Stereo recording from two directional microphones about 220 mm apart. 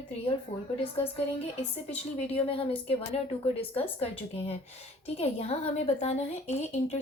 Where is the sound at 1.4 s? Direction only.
25° left (ahead or behind).